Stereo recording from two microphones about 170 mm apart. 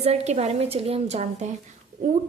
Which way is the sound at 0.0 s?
40° right (ahead or behind).